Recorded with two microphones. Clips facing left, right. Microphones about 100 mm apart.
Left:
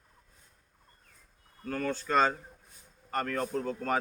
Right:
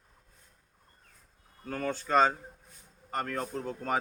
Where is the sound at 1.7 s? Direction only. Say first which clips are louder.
Right 1 dB; 20° right (ahead or behind).